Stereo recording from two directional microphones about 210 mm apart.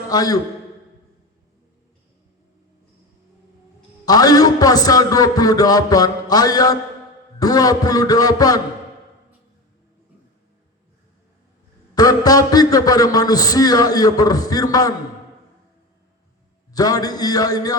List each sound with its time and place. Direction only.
0.1 s a man's voice: 20° left (ahead or behind)
4.0 s a man's voice: 20° left (ahead or behind)
11.9 s a man's voice: 20° left (ahead or behind)
16.7 s a man's voice: 20° left (ahead or behind)